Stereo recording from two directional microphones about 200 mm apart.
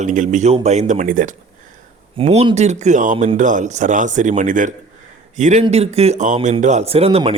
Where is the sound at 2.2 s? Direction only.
30° right (ahead or behind).